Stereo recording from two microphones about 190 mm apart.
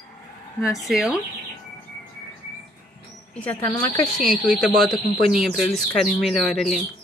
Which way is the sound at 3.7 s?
20° left (ahead or behind).